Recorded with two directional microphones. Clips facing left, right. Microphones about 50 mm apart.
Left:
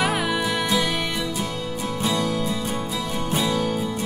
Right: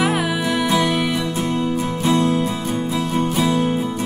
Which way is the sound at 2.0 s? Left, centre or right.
Right.